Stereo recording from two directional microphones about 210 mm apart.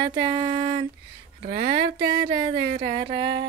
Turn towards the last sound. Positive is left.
turn(degrees=-25)  # may be behind; listen again after turning